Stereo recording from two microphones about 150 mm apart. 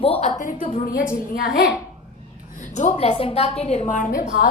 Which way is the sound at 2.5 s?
55° left (ahead or behind).